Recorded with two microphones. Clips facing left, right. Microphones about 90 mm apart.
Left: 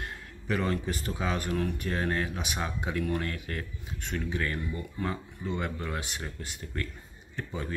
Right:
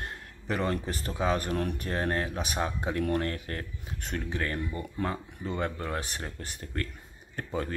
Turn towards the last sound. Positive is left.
turn(degrees=-50)  # may be behind; listen again after turning